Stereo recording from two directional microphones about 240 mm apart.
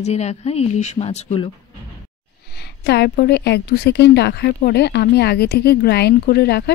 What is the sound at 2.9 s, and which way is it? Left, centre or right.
A woman's voice, left.